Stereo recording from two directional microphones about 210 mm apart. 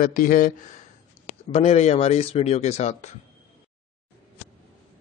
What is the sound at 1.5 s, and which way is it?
A man's voice, 30° left (ahead or behind).